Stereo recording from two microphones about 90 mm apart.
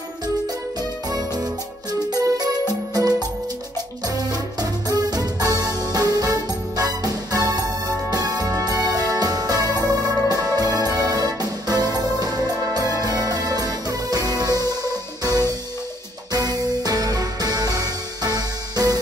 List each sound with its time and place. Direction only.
1.1 s music: 45° right (ahead or behind)
4.3 s music: 45° right (ahead or behind)
16.3 s music: 45° right (ahead or behind)